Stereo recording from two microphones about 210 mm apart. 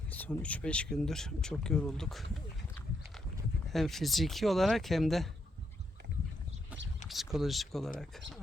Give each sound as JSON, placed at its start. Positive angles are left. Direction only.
{"t": 0.1, "sound": "speech", "side_deg": 5}
{"t": 3.7, "sound": "speech", "side_deg": 0}
{"t": 7.1, "sound": "speech", "side_deg": 0}